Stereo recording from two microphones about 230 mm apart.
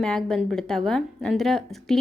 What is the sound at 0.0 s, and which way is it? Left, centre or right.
A woman's voice, centre.